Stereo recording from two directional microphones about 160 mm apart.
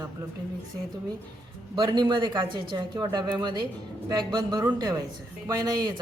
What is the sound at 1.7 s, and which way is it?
Speech, 30° right (ahead or behind).